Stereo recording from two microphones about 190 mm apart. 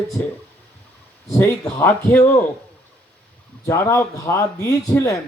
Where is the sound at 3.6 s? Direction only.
15° left (ahead or behind).